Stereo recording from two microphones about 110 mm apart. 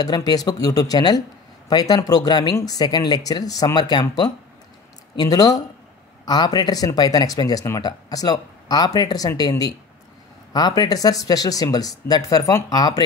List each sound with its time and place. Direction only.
0.0 s speech: 35° left (ahead or behind)